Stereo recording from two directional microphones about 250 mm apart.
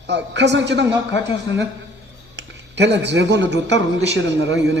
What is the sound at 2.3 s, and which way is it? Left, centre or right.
A man's voice, right.